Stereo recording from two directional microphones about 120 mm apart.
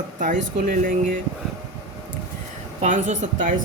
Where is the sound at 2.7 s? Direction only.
90° right.